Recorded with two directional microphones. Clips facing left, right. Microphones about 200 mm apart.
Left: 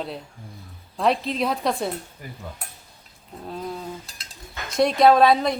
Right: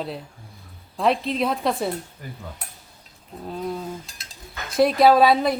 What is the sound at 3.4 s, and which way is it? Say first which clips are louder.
Speech: right 3 dB; centre (ahead or behind).